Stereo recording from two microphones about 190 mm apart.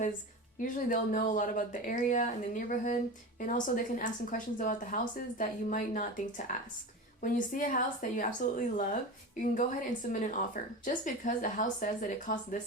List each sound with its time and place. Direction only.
0.6 s a woman's voice: 45° left (ahead or behind)
10.1 s a woman's voice: 40° left (ahead or behind)